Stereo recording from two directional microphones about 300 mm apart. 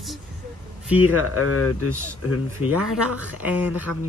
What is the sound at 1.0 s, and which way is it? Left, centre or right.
Speech, left.